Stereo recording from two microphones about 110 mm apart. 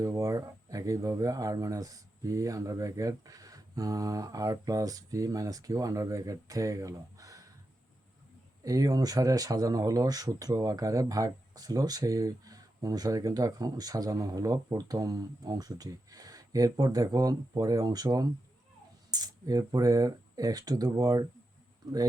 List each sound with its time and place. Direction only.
0.0 s speech: 30° right (ahead or behind)
8.6 s speech: 30° right (ahead or behind)